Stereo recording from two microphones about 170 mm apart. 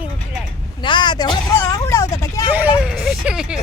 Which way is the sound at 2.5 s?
10° right (ahead or behind).